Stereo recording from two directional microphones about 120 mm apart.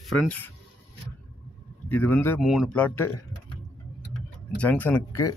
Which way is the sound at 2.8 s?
10° left (ahead or behind).